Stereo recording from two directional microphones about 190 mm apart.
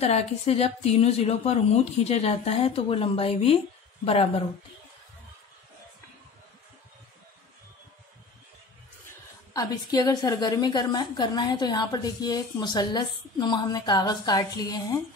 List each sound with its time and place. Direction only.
0.0 s a woman's voice: 35° left (ahead or behind)
9.5 s a woman's voice: 20° left (ahead or behind)